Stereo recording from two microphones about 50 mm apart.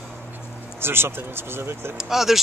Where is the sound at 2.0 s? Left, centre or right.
Centre.